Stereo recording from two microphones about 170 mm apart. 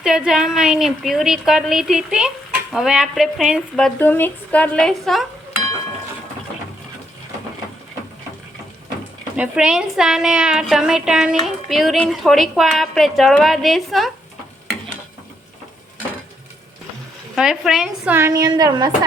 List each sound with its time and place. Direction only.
0.0 s a woman's voice: 5° right (ahead or behind)
9.3 s a woman's voice: 5° right (ahead or behind)
17.3 s a woman's voice: 5° right (ahead or behind); by 18.9 s 20° right (ahead or behind)